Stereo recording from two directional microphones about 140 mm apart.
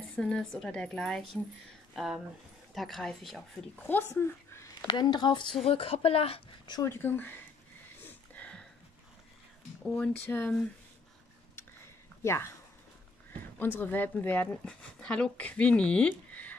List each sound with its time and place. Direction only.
0.1 s a woman's voice: 5° left (ahead or behind)
3.8 s speech: 15° left (ahead or behind)
4.8 s a woman's voice: 30° left (ahead or behind)
6.7 s speech: 20° left (ahead or behind)
8.0 s a sound: 10° left (ahead or behind)
9.8 s speech: 5° left (ahead or behind)
12.2 s speech: 20° left (ahead or behind)
13.6 s speech: 15° left (ahead or behind)